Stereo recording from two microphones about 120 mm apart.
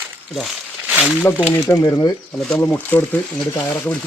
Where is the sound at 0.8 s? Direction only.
10° right (ahead or behind).